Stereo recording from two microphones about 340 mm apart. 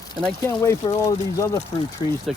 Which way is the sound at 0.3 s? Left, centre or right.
Centre.